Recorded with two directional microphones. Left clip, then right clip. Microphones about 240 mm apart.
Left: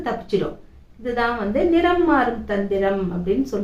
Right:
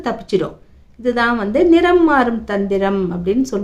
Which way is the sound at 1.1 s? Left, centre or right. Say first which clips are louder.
Right 5 dB; right.